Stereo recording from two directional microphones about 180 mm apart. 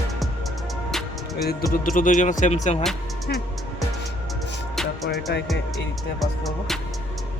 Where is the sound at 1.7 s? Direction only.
50° left (ahead or behind).